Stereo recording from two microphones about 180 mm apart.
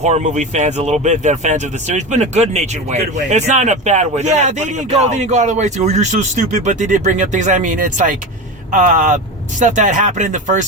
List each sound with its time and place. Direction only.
0.0 s a man's voice: 40° right (ahead or behind)